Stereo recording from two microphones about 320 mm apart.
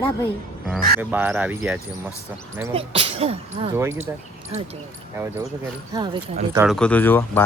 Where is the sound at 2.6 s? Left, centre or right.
Centre.